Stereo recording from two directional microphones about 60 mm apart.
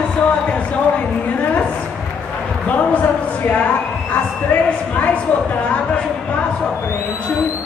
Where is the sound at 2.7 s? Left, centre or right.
Left.